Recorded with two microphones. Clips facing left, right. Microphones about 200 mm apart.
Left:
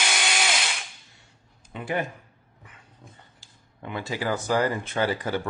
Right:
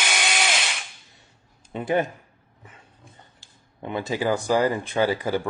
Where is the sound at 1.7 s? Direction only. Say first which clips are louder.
Right 5 dB; 20° right (ahead or behind).